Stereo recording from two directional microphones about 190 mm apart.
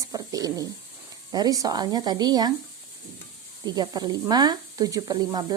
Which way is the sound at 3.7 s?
20° right (ahead or behind).